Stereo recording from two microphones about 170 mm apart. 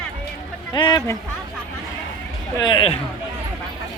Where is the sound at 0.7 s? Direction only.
30° left (ahead or behind).